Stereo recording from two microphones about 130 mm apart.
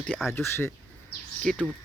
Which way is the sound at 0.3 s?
20° left (ahead or behind).